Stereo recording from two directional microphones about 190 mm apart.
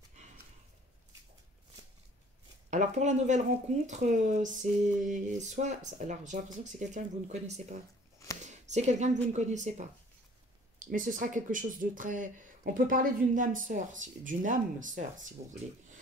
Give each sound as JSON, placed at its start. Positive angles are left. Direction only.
{"t": 2.7, "sound": "speech", "side_deg": -40}
{"t": 8.5, "sound": "speech", "side_deg": -40}